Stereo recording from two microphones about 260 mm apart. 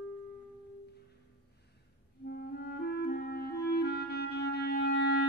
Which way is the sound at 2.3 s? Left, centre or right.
Left.